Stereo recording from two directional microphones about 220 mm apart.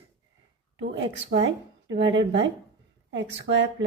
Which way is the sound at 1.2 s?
55° right (ahead or behind).